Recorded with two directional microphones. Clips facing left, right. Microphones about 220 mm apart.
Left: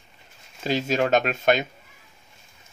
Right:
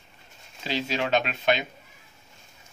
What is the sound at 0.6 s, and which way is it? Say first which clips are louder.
Speech: left 5 dB; 45° left (ahead or behind).